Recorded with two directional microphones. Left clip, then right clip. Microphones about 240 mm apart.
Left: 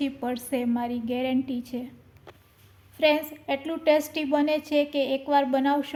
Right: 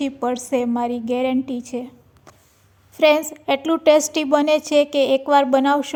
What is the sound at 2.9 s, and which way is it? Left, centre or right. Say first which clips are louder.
A woman's voice: right 7 dB; right.